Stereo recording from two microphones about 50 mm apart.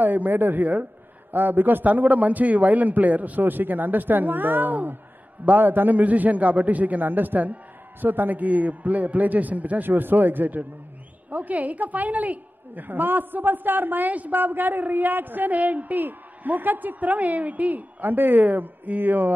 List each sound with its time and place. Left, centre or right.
0.0 s a woman's voice: right